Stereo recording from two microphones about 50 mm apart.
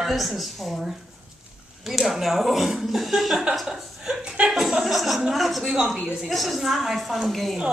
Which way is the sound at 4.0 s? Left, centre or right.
Centre.